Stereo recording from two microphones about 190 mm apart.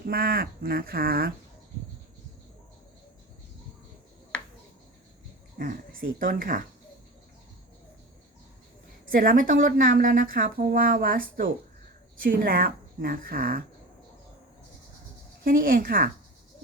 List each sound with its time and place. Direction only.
0.0 s a woman's voice: 50° right (ahead or behind)
5.5 s a woman's voice: 50° right (ahead or behind)
9.1 s a woman's voice: 45° right (ahead or behind)
15.4 s a woman's voice: 50° right (ahead or behind)